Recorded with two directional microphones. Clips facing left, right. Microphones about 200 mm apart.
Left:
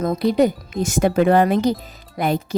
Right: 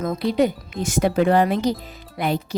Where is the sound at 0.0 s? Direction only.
40° left (ahead or behind).